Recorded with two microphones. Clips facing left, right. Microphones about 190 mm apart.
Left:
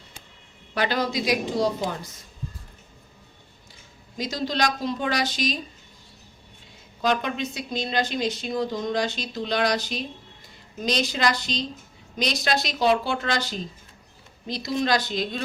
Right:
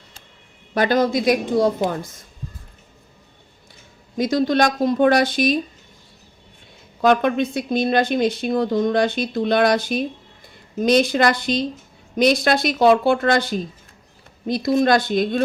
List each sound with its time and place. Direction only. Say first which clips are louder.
0.7 s speech: right 7 dB; 50° right (ahead or behind)
4.2 s speech: right 8 dB; 55° right (ahead or behind)
7.0 s speech: right 8 dB; 55° right (ahead or behind)